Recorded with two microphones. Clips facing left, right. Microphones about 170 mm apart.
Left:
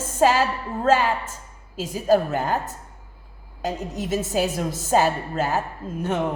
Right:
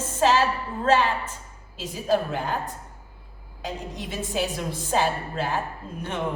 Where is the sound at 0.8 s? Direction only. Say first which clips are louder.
Left 2 dB; 45° left (ahead or behind).